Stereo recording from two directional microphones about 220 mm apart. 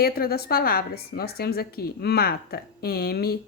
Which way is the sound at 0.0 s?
45° left (ahead or behind).